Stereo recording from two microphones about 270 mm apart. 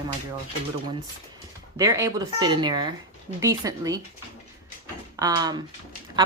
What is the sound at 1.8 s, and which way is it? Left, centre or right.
Speech, centre.